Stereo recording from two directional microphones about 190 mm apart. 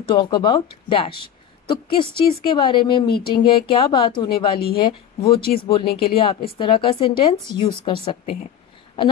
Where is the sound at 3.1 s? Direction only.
55° left (ahead or behind).